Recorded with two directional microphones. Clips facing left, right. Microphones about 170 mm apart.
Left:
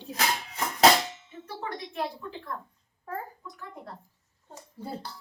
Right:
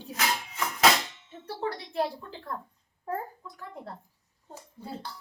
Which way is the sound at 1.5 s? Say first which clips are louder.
Right 3 dB; 35° right (ahead or behind).